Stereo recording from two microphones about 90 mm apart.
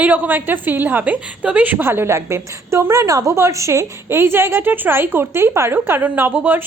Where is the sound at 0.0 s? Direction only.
20° right (ahead or behind).